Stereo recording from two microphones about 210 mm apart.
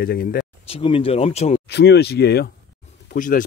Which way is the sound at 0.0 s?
45° left (ahead or behind).